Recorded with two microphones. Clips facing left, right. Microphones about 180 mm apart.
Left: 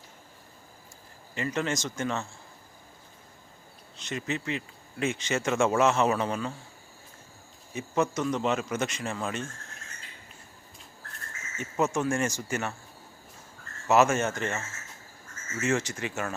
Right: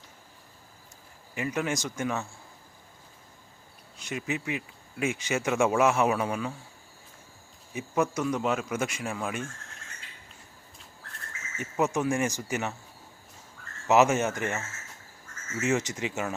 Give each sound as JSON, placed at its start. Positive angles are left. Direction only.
{"t": 1.4, "sound": "speech", "side_deg": -10}
{"t": 3.9, "sound": "speech", "side_deg": -10}
{"t": 7.7, "sound": "speech", "side_deg": -10}
{"t": 11.5, "sound": "speech", "side_deg": -15}
{"t": 13.8, "sound": "speech", "side_deg": -20}
{"t": 15.6, "sound": "speech", "side_deg": -20}